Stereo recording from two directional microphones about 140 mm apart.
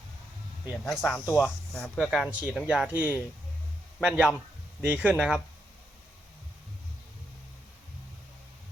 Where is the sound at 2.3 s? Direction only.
10° right (ahead or behind).